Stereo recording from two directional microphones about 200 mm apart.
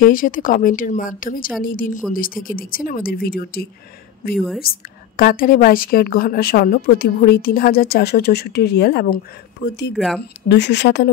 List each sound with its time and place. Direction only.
0.0 s a woman's voice: 45° left (ahead or behind)
9.9 s speech: centre (ahead or behind)
10.5 s speech: 60° left (ahead or behind)